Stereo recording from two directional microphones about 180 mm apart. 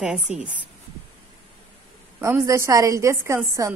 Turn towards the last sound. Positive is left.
turn(degrees=-15)  # may be behind; listen again after turning